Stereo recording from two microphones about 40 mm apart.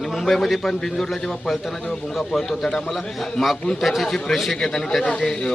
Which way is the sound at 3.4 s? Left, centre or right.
Centre.